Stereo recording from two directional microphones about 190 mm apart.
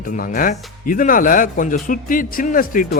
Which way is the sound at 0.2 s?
45° left (ahead or behind).